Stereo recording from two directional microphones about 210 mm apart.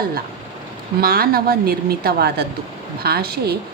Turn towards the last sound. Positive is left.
turn(degrees=-45)  # may be behind; listen again after turning